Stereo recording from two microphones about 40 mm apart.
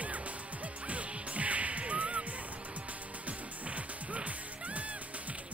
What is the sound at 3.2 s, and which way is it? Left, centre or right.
Music, right.